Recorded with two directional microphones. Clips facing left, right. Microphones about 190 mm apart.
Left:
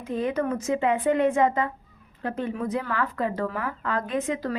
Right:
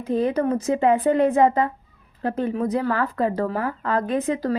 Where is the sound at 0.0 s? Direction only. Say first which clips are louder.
Right 5 dB; 35° right (ahead or behind).